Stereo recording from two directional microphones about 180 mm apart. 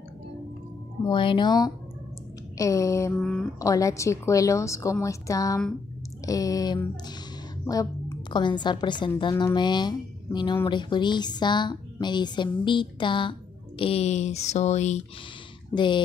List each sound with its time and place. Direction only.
1.0 s a woman's voice: 25° left (ahead or behind)
3.2 s speech: 5° left (ahead or behind)
3.5 s a woman's voice: 20° left (ahead or behind); by 15.0 s 40° left (ahead or behind)
15.7 s a woman's voice: 25° left (ahead or behind)